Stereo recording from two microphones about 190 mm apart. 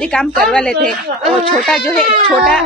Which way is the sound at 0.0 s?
5° left (ahead or behind).